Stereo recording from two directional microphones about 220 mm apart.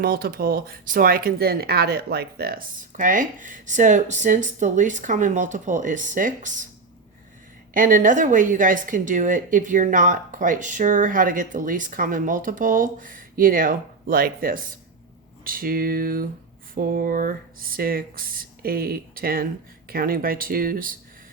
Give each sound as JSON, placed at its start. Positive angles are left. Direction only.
{"t": 0.0, "sound": "speech", "side_deg": -45}
{"t": 7.7, "sound": "speech", "side_deg": -40}